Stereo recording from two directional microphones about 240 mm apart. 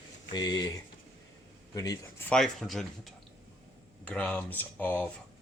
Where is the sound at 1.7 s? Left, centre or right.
Centre.